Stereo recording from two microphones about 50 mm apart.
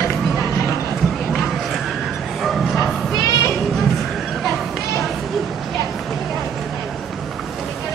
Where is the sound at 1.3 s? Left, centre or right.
Centre.